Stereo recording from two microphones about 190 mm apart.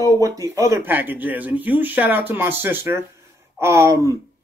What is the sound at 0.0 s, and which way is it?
Speech, 20° right (ahead or behind).